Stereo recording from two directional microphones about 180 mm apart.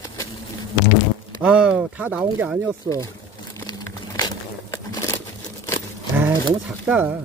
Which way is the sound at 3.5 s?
20° left (ahead or behind).